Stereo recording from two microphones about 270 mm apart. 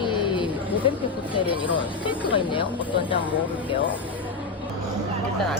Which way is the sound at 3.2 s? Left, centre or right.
Centre.